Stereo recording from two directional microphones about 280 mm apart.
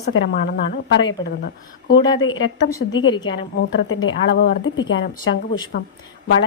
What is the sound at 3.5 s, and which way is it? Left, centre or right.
A woman's voice, left.